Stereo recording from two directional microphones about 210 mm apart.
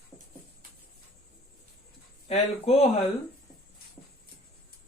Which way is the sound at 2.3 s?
30° left (ahead or behind).